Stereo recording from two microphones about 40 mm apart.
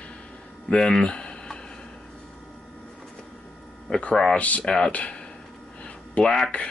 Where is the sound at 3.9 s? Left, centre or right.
Left.